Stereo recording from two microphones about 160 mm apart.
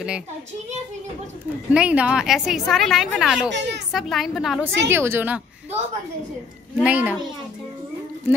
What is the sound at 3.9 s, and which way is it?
Speech, centre (ahead or behind).